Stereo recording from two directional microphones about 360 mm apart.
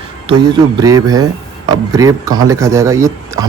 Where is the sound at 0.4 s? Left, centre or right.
Centre.